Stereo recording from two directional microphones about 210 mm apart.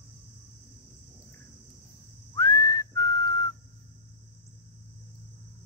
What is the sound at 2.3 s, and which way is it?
Whistling, 15° left (ahead or behind).